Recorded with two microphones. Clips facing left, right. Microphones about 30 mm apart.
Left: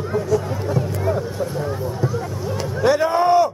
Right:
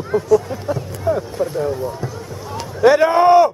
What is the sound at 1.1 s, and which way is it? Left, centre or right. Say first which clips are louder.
Speech: right 3 dB; centre.